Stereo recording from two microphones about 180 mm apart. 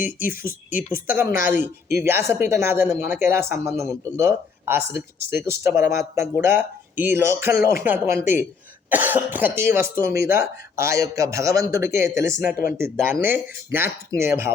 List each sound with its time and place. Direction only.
0.0 s speech: 50° left (ahead or behind)
0.3 s speech: 10° right (ahead or behind)